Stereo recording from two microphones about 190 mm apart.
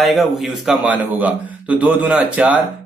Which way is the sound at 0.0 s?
Centre (ahead or behind).